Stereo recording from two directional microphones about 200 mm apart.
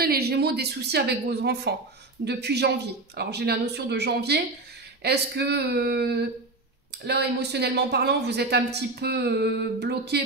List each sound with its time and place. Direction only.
0.0 s a woman's voice: 50° right (ahead or behind)